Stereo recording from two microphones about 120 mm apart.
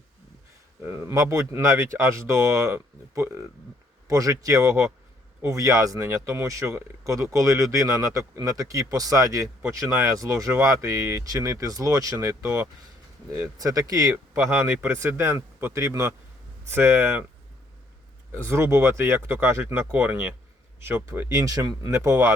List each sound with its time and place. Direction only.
0.8 s speech: 20° right (ahead or behind)
18.3 s speech: 20° right (ahead or behind)